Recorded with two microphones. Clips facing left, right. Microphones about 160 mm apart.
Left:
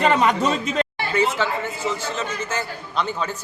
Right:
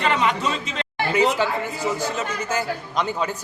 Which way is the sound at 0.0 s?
45° left (ahead or behind).